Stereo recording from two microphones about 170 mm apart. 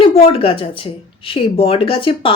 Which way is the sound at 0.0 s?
35° left (ahead or behind).